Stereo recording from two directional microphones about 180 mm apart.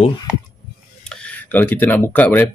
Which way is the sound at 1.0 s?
5° left (ahead or behind).